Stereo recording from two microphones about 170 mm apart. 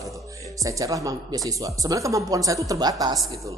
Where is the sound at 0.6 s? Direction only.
20° right (ahead or behind).